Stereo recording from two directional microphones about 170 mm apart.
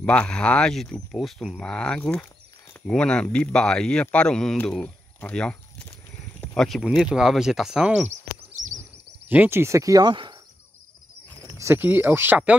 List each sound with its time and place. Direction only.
0.0 s speech: 5° left (ahead or behind)
8.1 s a sound: 45° right (ahead or behind)
9.3 s speech: 10° right (ahead or behind)
11.4 s speech: 15° right (ahead or behind)